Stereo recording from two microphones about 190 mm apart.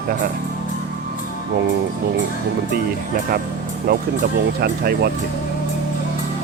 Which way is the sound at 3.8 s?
50° right (ahead or behind).